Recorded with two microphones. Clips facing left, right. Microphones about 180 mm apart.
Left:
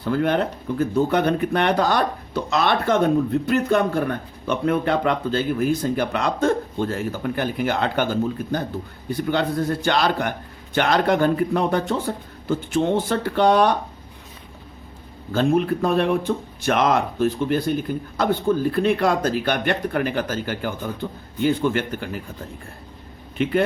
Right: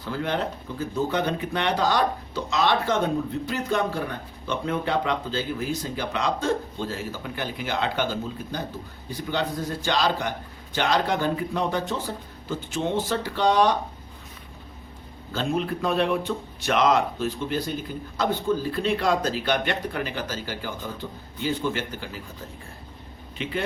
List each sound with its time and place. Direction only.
0.0 s speech: 55° left (ahead or behind)
15.3 s speech: 55° left (ahead or behind)
23.4 s speech: 55° left (ahead or behind)